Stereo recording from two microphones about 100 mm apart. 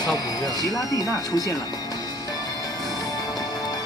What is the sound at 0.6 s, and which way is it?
Speech, 35° left (ahead or behind).